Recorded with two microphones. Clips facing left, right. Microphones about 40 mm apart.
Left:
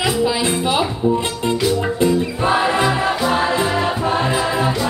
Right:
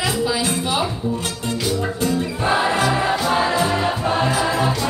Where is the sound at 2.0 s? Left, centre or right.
Left.